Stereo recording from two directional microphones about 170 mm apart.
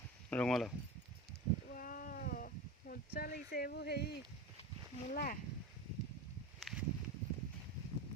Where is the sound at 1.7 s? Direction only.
55° left (ahead or behind); by 4.1 s 75° left (ahead or behind).